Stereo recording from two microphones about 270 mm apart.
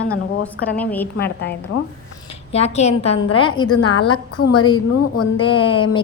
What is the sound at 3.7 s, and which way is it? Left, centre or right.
Speech, left.